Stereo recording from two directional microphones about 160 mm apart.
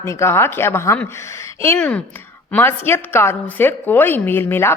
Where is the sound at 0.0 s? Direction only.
15° left (ahead or behind).